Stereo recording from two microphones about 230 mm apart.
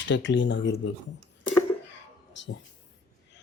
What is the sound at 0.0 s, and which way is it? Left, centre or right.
Speech, left.